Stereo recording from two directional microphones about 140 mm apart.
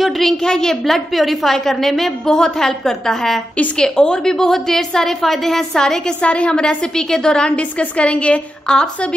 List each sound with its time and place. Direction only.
0.0 s a woman's voice: 5° left (ahead or behind)